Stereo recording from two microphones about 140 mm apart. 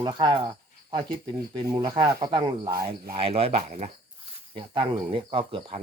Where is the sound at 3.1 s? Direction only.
45° right (ahead or behind).